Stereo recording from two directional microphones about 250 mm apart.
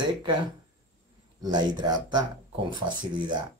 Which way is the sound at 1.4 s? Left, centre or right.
Centre.